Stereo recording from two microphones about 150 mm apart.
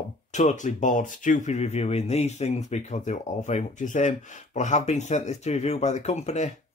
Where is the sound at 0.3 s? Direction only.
50° left (ahead or behind).